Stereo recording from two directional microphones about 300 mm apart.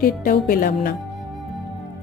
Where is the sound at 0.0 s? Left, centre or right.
Left.